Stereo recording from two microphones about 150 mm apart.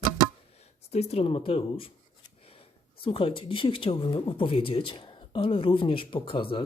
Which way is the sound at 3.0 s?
35° left (ahead or behind).